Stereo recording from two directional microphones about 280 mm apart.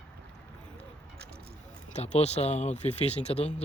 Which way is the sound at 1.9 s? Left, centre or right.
Left.